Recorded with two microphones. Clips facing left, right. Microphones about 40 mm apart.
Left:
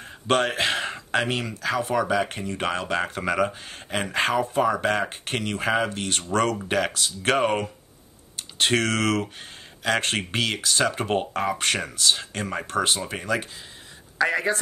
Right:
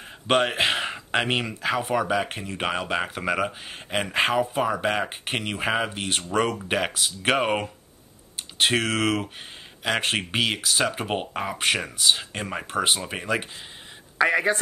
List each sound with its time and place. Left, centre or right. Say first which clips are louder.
0.3 s speech: right 1 dB; centre